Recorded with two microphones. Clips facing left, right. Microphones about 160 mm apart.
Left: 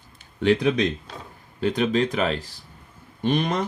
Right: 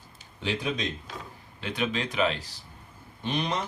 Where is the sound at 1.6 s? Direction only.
40° left (ahead or behind).